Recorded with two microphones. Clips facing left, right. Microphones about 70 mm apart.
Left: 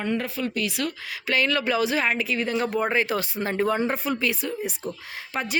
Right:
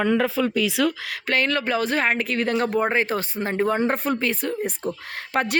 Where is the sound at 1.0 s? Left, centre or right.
Right.